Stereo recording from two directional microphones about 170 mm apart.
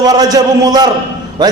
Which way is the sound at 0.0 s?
20° right (ahead or behind).